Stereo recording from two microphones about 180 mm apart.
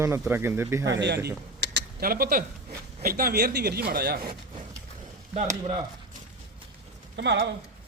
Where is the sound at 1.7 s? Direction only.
55° right (ahead or behind).